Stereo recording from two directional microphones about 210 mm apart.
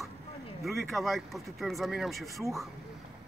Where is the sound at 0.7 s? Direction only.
Centre (ahead or behind).